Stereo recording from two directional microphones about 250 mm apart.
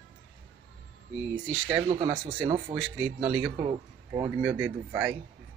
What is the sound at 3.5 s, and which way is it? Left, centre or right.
Speech, centre.